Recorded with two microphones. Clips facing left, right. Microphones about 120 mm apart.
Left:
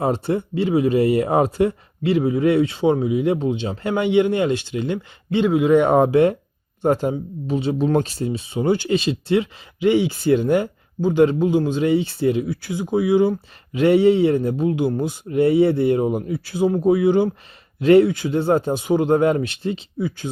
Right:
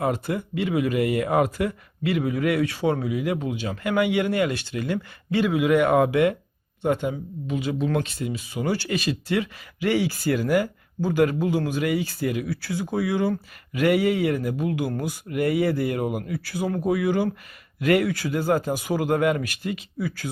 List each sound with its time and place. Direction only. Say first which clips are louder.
0.0 s speech: left 4 dB; 30° left (ahead or behind)